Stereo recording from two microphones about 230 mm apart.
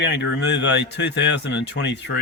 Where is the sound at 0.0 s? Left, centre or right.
Left.